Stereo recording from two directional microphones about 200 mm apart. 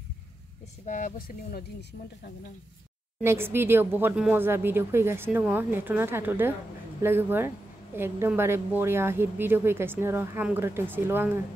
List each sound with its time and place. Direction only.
0.8 s speech: 40° left (ahead or behind)
3.2 s a woman's voice: 10° right (ahead or behind)